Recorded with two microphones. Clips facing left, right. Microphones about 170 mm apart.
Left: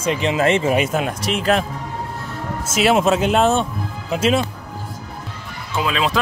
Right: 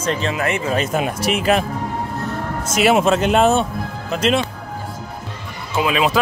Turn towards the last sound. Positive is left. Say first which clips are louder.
# right 3 dB
turn(degrees=-5)  # may be behind; listen again after turning